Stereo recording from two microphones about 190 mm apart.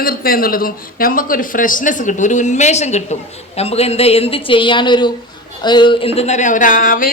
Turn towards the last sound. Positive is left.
turn(degrees=45)  # may be behind; listen again after turning